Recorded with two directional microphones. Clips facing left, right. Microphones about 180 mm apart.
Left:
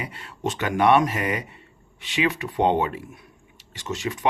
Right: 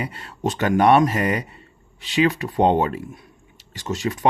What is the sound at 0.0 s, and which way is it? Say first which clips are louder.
Speech: right 4 dB; 40° right (ahead or behind).